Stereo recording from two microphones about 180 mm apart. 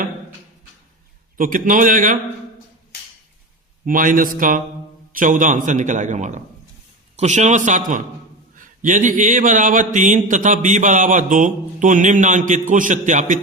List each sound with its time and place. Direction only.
1.4 s speech: 50° right (ahead or behind)
3.8 s speech: 50° right (ahead or behind)